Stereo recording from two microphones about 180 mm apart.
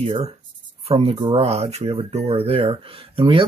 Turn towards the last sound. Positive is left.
turn(degrees=-30)  # may be behind; listen again after turning